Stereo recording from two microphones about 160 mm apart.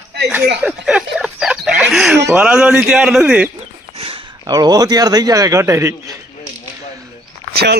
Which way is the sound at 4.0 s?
30° right (ahead or behind).